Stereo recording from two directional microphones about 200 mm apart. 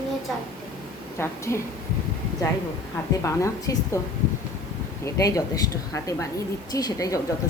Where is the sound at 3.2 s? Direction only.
15° left (ahead or behind).